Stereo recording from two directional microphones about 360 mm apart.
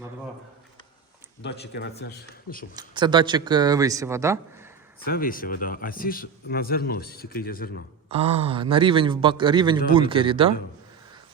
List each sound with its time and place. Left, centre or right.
1.4 s speech: left
2.7 s a man's voice: centre
5.0 s speech: left
8.1 s a man's voice: centre